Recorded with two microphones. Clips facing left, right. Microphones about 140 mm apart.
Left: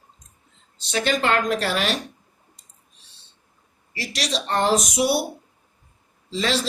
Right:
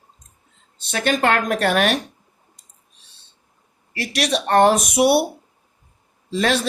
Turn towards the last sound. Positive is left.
turn(degrees=-55)  # may be behind; listen again after turning